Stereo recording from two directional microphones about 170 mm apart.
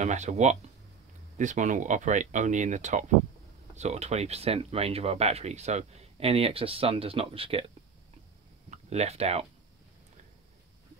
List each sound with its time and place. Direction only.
0.0 s speech: 45° right (ahead or behind)
8.6 s speech: 40° right (ahead or behind)